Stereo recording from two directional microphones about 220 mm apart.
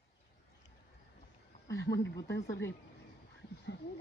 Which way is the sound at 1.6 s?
50° left (ahead or behind).